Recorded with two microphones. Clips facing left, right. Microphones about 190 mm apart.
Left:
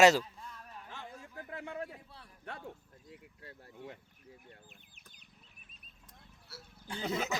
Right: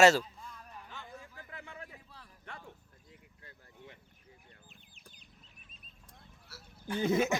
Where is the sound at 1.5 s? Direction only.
60° left (ahead or behind).